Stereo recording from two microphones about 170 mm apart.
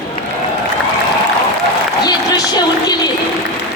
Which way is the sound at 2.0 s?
25° left (ahead or behind).